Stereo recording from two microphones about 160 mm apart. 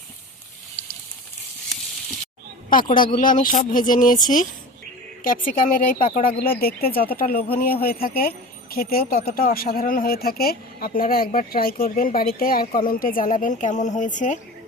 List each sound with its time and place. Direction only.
2.6 s speech: 60° left (ahead or behind)